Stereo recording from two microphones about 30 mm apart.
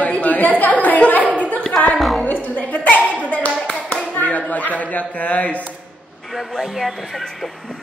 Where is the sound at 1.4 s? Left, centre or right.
Left.